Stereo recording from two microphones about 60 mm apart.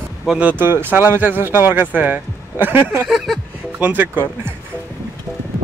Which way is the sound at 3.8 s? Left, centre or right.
Right.